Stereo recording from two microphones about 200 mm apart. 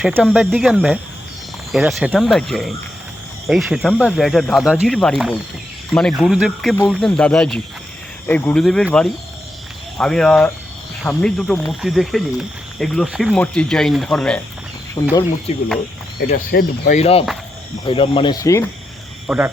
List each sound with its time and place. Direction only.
0.0 s speech: 5° right (ahead or behind)
15.0 s speech: 20° left (ahead or behind)
15.5 s speech: 30° left (ahead or behind)
16.3 s speech: 45° left (ahead or behind); by 18.7 s 15° left (ahead or behind)
19.3 s speech: 5° right (ahead or behind)